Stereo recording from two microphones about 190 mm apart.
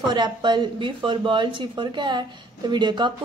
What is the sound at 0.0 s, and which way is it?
Speech, 25° right (ahead or behind).